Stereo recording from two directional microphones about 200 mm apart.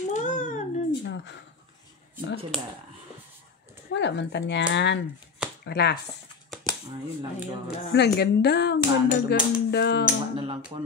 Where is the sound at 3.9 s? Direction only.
60° left (ahead or behind).